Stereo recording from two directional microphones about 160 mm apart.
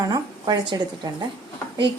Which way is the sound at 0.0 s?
25° right (ahead or behind).